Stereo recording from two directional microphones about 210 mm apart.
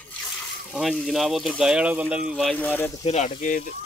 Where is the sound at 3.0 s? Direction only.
30° left (ahead or behind).